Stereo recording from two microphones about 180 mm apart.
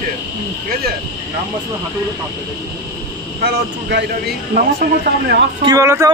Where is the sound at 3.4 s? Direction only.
65° right (ahead or behind).